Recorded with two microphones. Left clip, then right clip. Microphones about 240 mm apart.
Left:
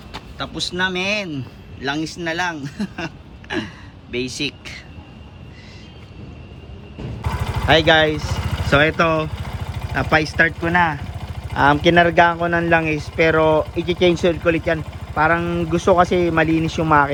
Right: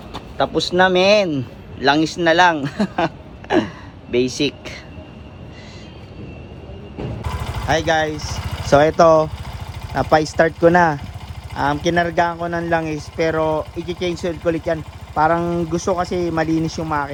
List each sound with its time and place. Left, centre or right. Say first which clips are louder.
0.3 s speech: right 8 dB; centre
4.4 s speech: right 4 dB; centre
7.2 s vehicle: left 7 dB; centre
9.0 s speech: right 6 dB; centre
9.4 s vehicle: left 2 dB; centre
9.9 s speech: right 2 dB; centre
10.6 s speech: right 4 dB; left
11.5 s speech: left 4 dB; centre